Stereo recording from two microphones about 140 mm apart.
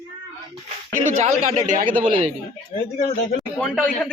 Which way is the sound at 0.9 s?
70° right (ahead or behind).